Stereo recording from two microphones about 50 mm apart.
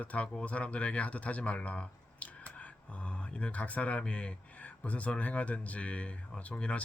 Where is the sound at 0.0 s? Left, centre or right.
Left.